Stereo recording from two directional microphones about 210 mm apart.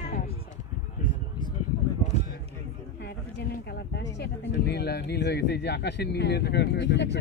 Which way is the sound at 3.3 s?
55° left (ahead or behind).